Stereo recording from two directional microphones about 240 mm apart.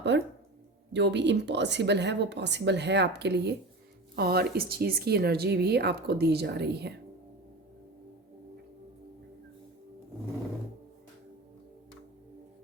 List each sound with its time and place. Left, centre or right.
0.1 s a woman's voice: right